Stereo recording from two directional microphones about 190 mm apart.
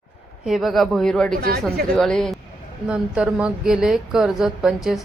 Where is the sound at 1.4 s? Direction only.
55° right (ahead or behind).